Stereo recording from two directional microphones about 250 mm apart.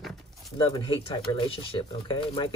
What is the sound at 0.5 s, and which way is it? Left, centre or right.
Speech, centre.